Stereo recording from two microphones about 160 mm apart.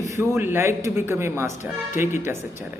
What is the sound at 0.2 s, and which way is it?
A man's voice, 15° right (ahead or behind).